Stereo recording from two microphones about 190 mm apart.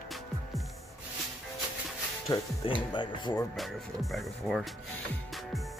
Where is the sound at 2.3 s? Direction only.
20° left (ahead or behind).